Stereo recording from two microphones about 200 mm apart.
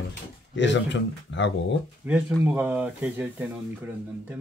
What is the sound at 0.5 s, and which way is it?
Speech, 60° left (ahead or behind).